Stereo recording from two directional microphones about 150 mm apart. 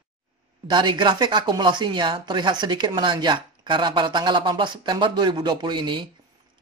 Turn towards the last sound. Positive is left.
turn(degrees=-30)  # may be behind; listen again after turning